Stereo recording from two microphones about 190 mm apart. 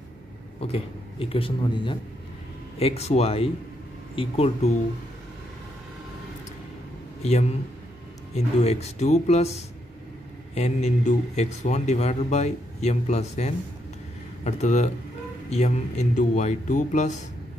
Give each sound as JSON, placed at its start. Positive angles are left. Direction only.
{"t": 0.6, "sound": "a man's voice", "side_deg": 30}
{"t": 7.2, "sound": "a man's voice", "side_deg": 35}